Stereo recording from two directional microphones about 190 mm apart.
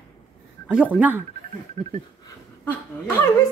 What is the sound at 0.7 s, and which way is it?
Speech, 5° right (ahead or behind).